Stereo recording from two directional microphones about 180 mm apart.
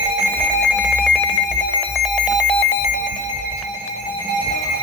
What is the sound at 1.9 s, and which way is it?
Alarm clock, 5° left (ahead or behind).